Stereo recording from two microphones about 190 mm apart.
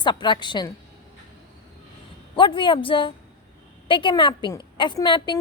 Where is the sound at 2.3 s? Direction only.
25° left (ahead or behind).